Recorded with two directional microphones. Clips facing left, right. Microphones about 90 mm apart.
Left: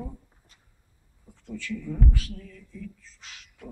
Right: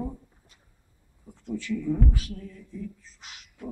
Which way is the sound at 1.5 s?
20° right (ahead or behind).